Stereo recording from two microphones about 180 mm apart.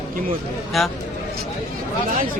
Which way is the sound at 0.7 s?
Centre (ahead or behind).